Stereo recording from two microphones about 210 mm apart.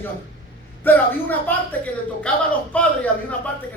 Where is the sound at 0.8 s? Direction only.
10° left (ahead or behind).